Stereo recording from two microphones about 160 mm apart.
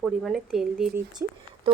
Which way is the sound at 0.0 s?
Centre (ahead or behind).